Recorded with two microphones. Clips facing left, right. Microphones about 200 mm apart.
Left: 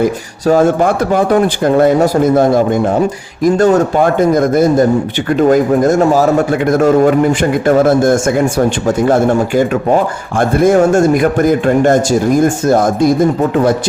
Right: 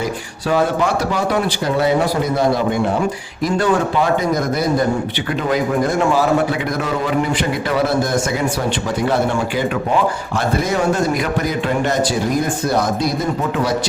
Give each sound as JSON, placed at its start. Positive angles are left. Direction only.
{"t": 0.0, "sound": "speech", "side_deg": 45}